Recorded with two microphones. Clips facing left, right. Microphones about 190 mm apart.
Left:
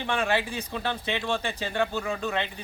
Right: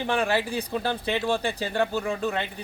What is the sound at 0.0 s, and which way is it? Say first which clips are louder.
Speech: right 2 dB; 35° right (ahead or behind).